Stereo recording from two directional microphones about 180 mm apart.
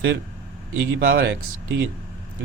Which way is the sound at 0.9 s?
55° right (ahead or behind).